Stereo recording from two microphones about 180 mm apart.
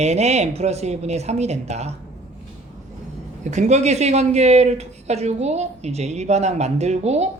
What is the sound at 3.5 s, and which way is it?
Speech, 40° right (ahead or behind).